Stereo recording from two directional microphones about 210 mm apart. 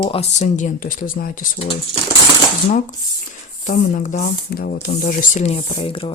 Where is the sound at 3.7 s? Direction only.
35° left (ahead or behind).